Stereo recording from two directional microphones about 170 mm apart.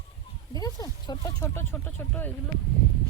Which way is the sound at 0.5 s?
20° left (ahead or behind).